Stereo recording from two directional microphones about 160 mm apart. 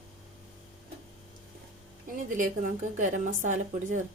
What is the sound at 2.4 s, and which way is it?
Speech, 55° right (ahead or behind).